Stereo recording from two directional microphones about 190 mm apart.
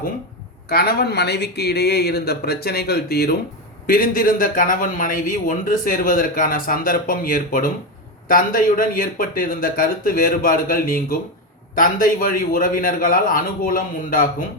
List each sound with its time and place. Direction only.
0.7 s speech: 55° left (ahead or behind)